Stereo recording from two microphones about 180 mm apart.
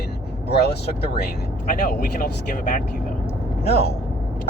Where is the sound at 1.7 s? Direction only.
50° left (ahead or behind).